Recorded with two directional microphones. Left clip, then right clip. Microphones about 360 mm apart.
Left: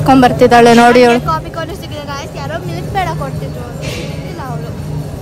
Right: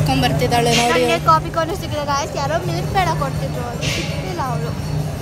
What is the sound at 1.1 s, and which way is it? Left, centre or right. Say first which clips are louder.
Speech: right 1 dB; centre.